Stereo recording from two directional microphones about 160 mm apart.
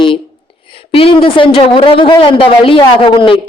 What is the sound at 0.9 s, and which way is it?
A woman's voice, 35° left (ahead or behind).